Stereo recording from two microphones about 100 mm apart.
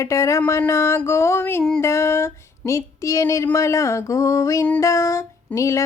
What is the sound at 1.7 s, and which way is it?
Female singing, 25° left (ahead or behind).